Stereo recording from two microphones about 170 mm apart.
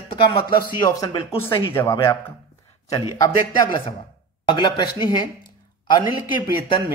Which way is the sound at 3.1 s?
20° left (ahead or behind).